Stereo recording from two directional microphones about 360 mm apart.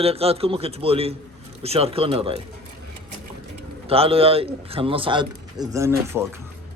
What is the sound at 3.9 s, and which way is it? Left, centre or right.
A man's voice, centre.